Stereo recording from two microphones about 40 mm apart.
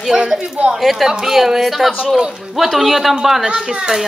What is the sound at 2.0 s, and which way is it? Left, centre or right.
Speech, centre.